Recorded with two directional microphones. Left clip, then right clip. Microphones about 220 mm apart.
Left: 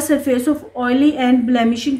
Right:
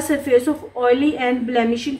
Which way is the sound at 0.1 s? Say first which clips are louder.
Even; 40° left (ahead or behind).